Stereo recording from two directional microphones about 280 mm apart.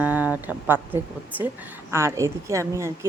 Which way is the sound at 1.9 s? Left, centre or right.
Centre.